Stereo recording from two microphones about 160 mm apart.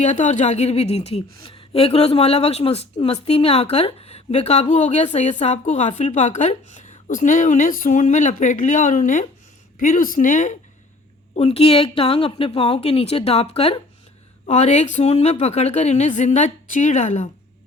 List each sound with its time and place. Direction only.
0.0 s a woman's voice: 50° left (ahead or behind)
11.3 s a woman's voice: 40° left (ahead or behind)